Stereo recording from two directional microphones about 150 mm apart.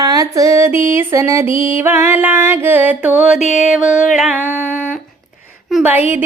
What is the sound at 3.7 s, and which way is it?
Music, 5° right (ahead or behind).